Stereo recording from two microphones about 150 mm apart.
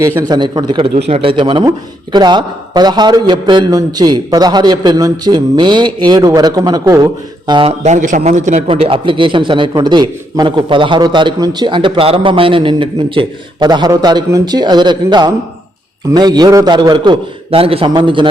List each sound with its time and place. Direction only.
0.0 s a man's voice: 20° right (ahead or behind)
0.3 s a man's voice: 30° right (ahead or behind)
0.9 s a man's voice: 40° right (ahead or behind)
7.9 s a man's voice: 55° right (ahead or behind)
8.7 s a man's voice: 35° right (ahead or behind)